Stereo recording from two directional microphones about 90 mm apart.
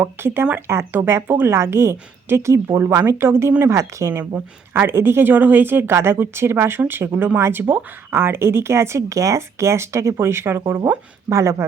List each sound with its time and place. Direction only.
0.0 s speech: 25° right (ahead or behind)
11.3 s speech: 35° right (ahead or behind)